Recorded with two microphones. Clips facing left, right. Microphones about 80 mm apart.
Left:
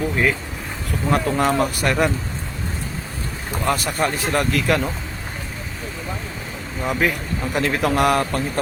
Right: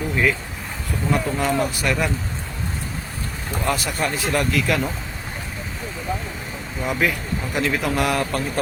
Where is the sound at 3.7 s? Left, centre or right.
Left.